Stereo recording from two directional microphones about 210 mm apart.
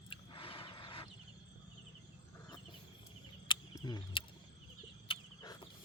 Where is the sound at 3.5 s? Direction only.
20° left (ahead or behind).